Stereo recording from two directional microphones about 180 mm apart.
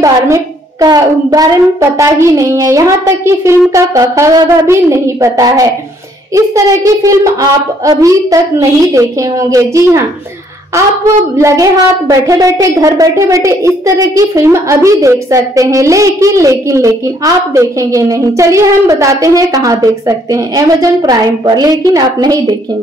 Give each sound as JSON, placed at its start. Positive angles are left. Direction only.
{"t": 0.0, "sound": "a woman's voice", "side_deg": -20}
{"t": 11.3, "sound": "a woman's voice", "side_deg": -20}